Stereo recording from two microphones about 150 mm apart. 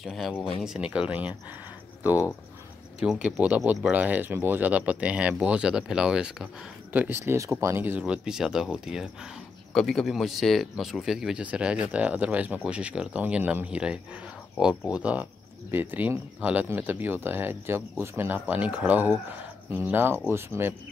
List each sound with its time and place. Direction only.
0.0 s speech: centre (ahead or behind)
3.0 s speech: 5° right (ahead or behind)